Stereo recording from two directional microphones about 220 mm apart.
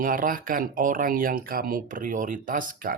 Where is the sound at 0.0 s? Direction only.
40° right (ahead or behind).